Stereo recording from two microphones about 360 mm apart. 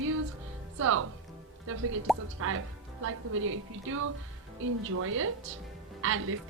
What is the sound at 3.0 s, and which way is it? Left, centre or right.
A woman's voice, right.